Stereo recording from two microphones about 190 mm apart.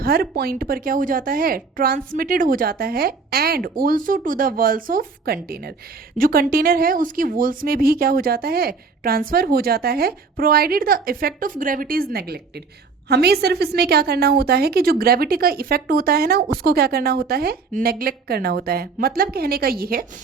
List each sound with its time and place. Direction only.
0.0 s a woman's voice: 55° right (ahead or behind)